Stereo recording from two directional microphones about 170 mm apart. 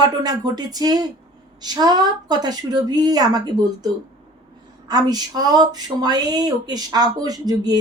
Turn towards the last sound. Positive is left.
turn(degrees=-20)  # may be behind; listen again after turning